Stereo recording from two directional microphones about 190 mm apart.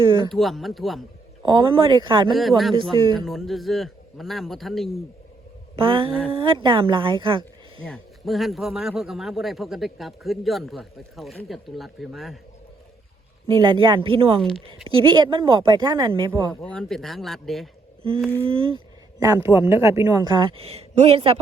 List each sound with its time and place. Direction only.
0.3 s a man's voice: centre (ahead or behind)
1.5 s speech: 25° right (ahead or behind)
2.3 s a man's voice: centre (ahead or behind)
5.7 s speech: 25° right (ahead or behind)
7.9 s a man's voice: 5° left (ahead or behind)
13.5 s speech: 25° right (ahead or behind)
16.5 s a man's voice: 5° left (ahead or behind)
18.4 s speech: 30° right (ahead or behind)
19.2 s speech: 15° right (ahead or behind); by 21.3 s 30° right (ahead or behind)